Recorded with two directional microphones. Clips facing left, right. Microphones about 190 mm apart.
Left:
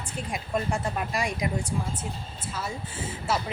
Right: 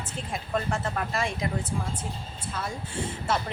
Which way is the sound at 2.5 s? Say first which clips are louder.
Right 1 dB; 5° left (ahead or behind).